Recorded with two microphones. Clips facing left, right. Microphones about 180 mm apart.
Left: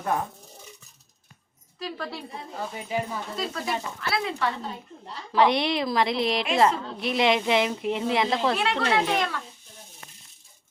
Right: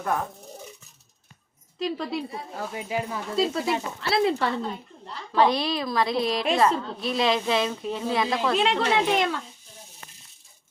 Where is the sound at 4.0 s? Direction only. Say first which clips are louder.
Right 6 dB; 30° right (ahead or behind).